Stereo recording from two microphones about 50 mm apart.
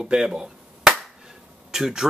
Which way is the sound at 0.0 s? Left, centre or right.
Centre.